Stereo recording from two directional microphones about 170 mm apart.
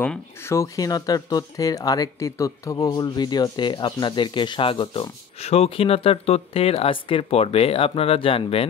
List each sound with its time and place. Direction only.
0.0 s speech: 10° left (ahead or behind); by 8.6 s 35° left (ahead or behind)